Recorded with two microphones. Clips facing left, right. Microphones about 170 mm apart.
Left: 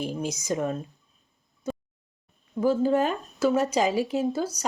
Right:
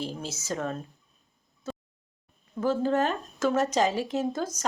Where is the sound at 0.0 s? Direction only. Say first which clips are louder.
Left 5 dB; 15° left (ahead or behind).